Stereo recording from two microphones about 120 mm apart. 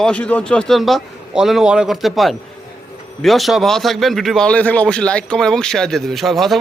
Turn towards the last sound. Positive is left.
turn(degrees=0)  # may be behind; listen again after turning